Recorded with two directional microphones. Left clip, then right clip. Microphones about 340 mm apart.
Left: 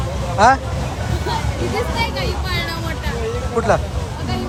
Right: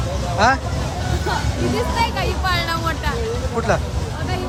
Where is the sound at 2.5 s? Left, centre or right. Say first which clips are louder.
Right 3 dB; centre.